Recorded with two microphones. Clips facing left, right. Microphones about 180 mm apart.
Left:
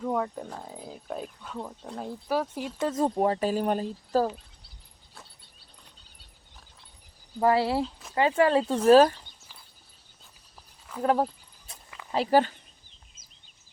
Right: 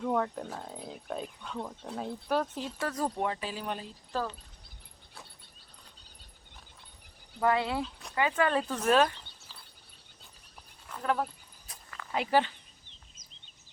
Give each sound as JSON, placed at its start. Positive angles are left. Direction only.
{"t": 0.0, "sound": "speech", "side_deg": 5}
{"t": 2.2, "sound": "speech", "side_deg": 10}
{"t": 2.7, "sound": "speech", "side_deg": 20}
{"t": 3.2, "sound": "speech", "side_deg": 35}
{"t": 7.3, "sound": "speech", "side_deg": 30}
{"t": 11.0, "sound": "speech", "side_deg": 35}